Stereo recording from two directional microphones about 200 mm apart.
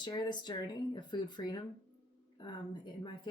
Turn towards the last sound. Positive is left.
turn(degrees=25)  # may be behind; listen again after turning